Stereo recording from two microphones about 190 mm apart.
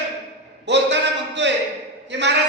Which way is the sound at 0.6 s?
65° right (ahead or behind).